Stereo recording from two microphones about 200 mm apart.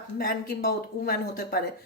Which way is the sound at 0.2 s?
50° left (ahead or behind).